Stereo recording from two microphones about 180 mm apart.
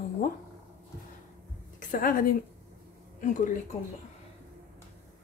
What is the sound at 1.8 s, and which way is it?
A woman's voice, 50° left (ahead or behind).